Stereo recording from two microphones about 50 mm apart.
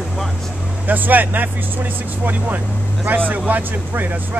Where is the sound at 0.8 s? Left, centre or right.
Right.